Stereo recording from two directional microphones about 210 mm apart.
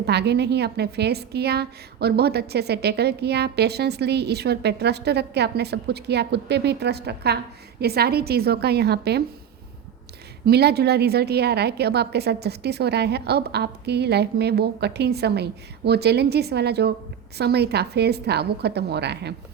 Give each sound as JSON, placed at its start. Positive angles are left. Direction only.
{"t": 0.0, "sound": "a woman's voice", "side_deg": -50}
{"t": 10.4, "sound": "a woman's voice", "side_deg": -50}